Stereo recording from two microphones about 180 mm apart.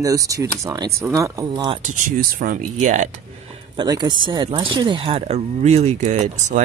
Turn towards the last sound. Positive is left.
turn(degrees=-40)  # may be behind; listen again after turning